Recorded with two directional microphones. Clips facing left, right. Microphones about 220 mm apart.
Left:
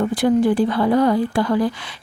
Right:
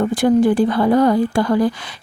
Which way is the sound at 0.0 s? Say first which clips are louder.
Right 2 dB; 45° right (ahead or behind).